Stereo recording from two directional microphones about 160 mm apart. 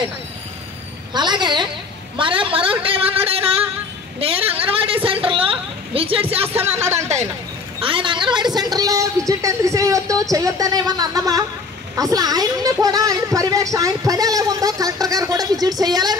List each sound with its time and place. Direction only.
1.1 s a woman's voice: 25° right (ahead or behind)
4.2 s a woman's voice: 35° right (ahead or behind)
7.8 s speech: 30° right (ahead or behind)